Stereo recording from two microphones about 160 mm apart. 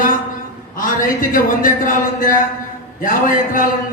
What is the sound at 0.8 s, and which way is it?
A man's voice, 60° left (ahead or behind).